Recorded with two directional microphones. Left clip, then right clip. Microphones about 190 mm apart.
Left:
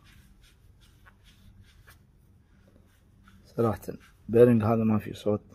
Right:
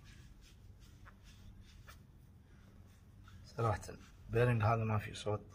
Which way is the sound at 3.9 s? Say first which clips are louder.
Left 14 dB; 40° left (ahead or behind).